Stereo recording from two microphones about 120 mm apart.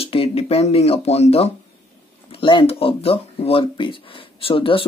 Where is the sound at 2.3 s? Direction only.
40° left (ahead or behind).